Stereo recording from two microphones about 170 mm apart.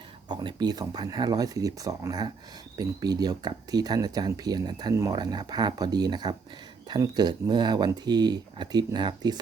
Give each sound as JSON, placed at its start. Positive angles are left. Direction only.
{"t": 0.3, "sound": "speech", "side_deg": -25}